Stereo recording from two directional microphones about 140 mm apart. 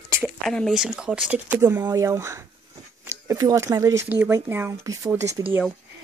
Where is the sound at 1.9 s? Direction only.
20° right (ahead or behind).